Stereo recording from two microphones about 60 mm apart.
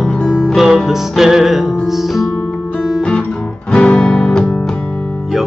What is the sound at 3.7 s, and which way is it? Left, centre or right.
Music, centre.